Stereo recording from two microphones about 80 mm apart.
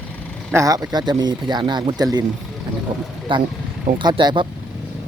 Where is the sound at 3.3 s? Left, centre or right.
Right.